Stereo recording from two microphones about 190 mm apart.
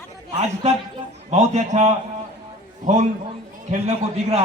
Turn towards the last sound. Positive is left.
turn(degrees=-35)  # may be behind; listen again after turning